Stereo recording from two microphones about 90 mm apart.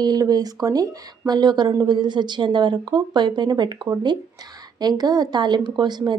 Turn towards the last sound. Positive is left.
turn(degrees=-55)  # may be behind; listen again after turning